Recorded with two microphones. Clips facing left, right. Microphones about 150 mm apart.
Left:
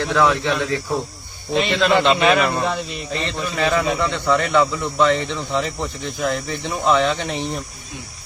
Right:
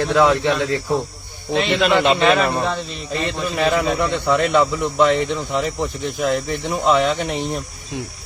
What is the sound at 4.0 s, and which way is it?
Speech, 15° right (ahead or behind).